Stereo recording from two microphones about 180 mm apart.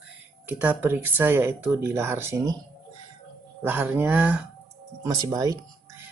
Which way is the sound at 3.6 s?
10° right (ahead or behind).